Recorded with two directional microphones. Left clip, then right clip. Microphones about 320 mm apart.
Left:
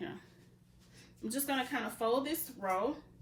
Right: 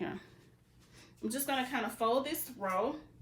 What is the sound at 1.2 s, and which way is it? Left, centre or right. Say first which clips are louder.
Speech: right 1 dB; centre.